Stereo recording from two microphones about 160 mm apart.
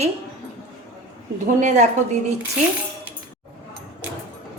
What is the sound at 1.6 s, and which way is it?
Speech, 45° right (ahead or behind).